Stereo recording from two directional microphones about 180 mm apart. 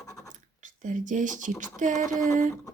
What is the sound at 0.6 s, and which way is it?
Speech, 45° right (ahead or behind).